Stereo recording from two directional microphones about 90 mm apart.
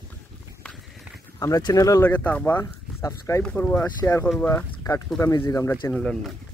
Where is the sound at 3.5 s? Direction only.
20° left (ahead or behind).